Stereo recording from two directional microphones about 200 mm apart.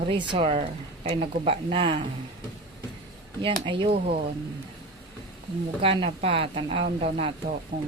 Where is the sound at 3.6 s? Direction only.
25° right (ahead or behind).